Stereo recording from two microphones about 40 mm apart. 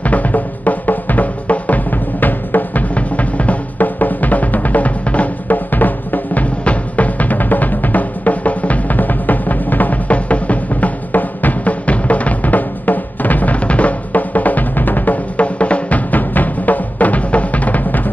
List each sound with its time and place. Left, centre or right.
0.0 s music: left
5.7 s music: left
15.3 s music: left